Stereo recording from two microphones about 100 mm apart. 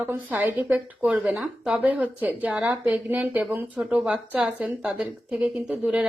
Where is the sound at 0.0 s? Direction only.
15° right (ahead or behind).